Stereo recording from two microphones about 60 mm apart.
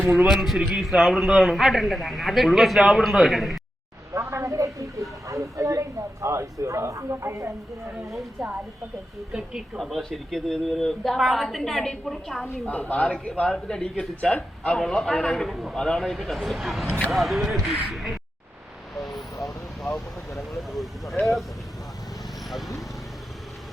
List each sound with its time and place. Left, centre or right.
0.3 s a man's voice: centre
4.1 s a sound: right
5.3 s a man's voice: right
8.4 s a man's voice: centre
9.7 s a man's voice: centre
12.6 s a woman's voice: left
14.8 s a man's voice: centre
15.8 s a man's voice: centre
18.9 s vehicle: centre
20.6 s vehicle: centre
22.4 s vehicle: centre